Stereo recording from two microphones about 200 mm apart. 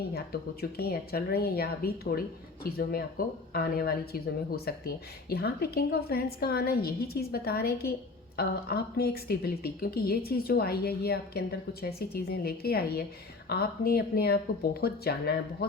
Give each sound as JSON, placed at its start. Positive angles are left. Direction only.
{"t": 0.1, "sound": "speech", "side_deg": 50}